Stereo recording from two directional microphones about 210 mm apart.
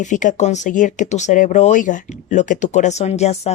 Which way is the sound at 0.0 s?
35° left (ahead or behind).